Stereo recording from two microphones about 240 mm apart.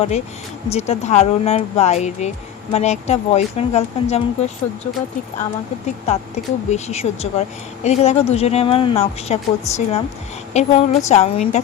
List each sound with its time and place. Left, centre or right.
0.7 s a woman's voice: left
6.7 s a woman's voice: left